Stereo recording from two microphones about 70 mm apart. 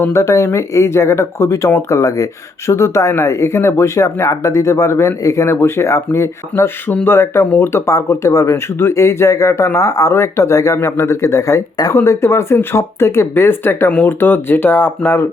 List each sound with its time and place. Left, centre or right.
0.1 s speech: left
6.8 s speech: left
11.9 s speech: left